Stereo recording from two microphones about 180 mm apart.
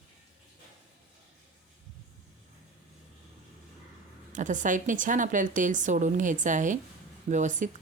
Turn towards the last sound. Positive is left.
turn(degrees=-45)  # may be behind; listen again after turning